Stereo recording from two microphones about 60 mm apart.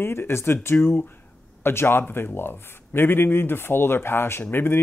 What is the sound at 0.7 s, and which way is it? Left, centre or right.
Speech, left.